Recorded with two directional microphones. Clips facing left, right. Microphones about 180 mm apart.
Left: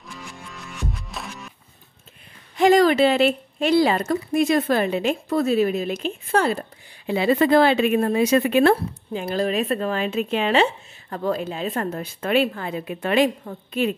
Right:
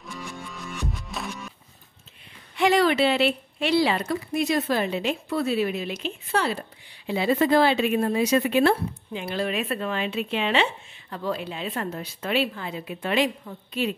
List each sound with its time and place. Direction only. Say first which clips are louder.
0.0 s music: right 2 dB; centre (ahead or behind)
2.5 s speech: left 5 dB; 40° left (ahead or behind)
7.1 s speech: left 3 dB; 65° left (ahead or behind)